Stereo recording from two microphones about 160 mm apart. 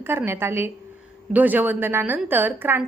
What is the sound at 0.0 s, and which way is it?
A woman's voice, 15° right (ahead or behind).